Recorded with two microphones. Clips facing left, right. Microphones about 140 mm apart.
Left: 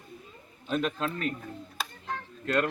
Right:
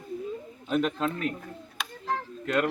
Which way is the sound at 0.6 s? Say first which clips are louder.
Right 3 dB; 15° right (ahead or behind).